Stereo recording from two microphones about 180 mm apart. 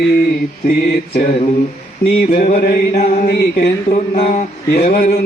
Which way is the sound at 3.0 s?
40° left (ahead or behind).